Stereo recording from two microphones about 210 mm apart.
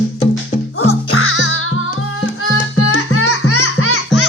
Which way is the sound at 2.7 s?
90° left.